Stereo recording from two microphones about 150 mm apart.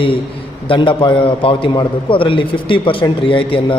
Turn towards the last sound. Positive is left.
turn(degrees=35)  # may be behind; listen again after turning